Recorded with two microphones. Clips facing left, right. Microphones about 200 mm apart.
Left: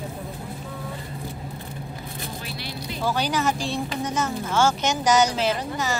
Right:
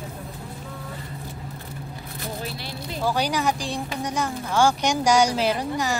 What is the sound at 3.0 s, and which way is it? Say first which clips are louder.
A woman's voice: right 1 dB; 15° right (ahead or behind).